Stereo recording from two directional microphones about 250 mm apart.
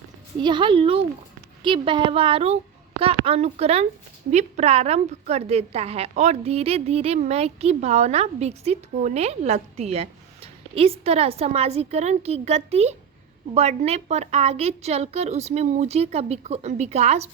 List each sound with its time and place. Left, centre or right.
0.3 s a woman's voice: centre